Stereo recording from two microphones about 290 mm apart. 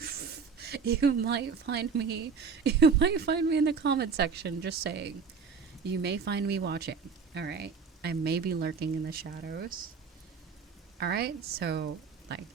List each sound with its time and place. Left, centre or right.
0.0 s speech: right
11.0 s speech: right